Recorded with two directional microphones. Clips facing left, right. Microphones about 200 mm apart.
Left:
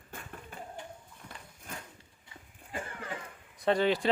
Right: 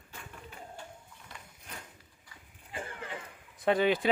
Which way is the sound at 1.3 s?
50° left (ahead or behind).